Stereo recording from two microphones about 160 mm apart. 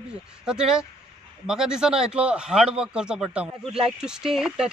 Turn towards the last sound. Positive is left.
turn(degrees=0)  # may be behind; listen again after turning